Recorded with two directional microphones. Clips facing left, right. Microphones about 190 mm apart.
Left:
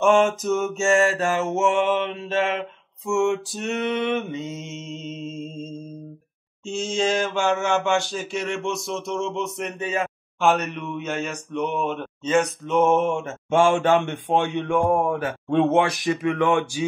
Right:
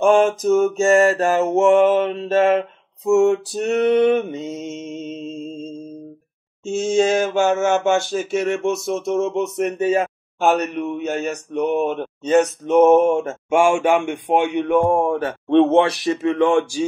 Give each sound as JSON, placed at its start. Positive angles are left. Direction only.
{"t": 0.4, "sound": "mantra", "side_deg": -35}
{"t": 6.6, "sound": "a sound", "side_deg": -50}
{"t": 7.0, "sound": "mantra", "side_deg": -50}
{"t": 13.5, "sound": "a man's voice", "side_deg": -10}
{"t": 14.9, "sound": "a man's voice", "side_deg": -30}